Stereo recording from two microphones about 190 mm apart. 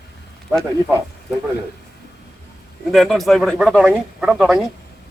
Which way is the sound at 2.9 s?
Centre (ahead or behind).